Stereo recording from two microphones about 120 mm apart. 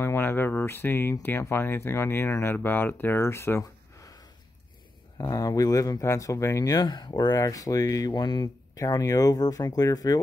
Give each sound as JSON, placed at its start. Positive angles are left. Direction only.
{"t": 0.0, "sound": "speech", "side_deg": 20}